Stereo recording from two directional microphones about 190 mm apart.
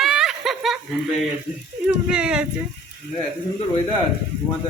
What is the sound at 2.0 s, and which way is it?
Speech, 5° right (ahead or behind).